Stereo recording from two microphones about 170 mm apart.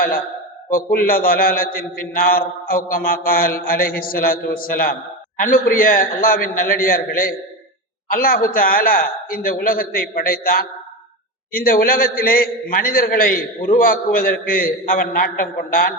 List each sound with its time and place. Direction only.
0.9 s a man's voice: 55° left (ahead or behind)